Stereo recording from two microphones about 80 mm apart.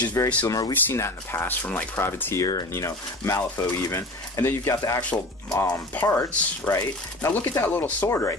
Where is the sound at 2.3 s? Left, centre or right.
Left.